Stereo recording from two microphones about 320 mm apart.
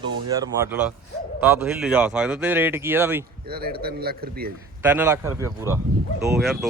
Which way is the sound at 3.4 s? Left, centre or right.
Right.